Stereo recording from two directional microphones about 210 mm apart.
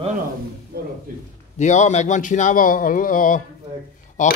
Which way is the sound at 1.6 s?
35° left (ahead or behind).